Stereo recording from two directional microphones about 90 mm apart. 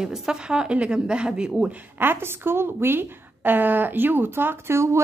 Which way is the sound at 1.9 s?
25° right (ahead or behind).